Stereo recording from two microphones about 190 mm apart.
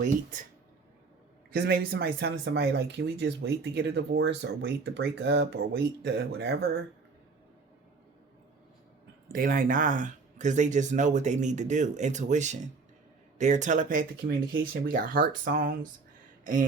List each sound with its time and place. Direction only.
1.5 s speech: 55° right (ahead or behind)
9.3 s speech: 45° right (ahead or behind)
14.3 s speech: 90° right
14.7 s speech: 45° right (ahead or behind)